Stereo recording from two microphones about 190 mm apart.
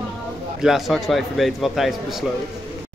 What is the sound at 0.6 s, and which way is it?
A man's voice, centre (ahead or behind).